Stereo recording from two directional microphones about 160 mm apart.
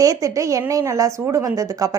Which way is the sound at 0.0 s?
20° right (ahead or behind).